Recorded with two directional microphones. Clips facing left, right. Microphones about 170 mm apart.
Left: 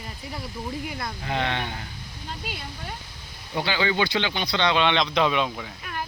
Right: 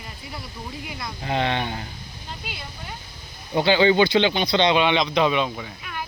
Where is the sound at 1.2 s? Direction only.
25° right (ahead or behind).